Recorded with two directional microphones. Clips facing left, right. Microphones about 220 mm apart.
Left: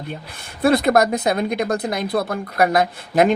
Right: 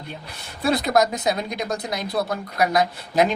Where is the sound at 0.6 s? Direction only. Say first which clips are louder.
Left 4 dB; 55° left (ahead or behind).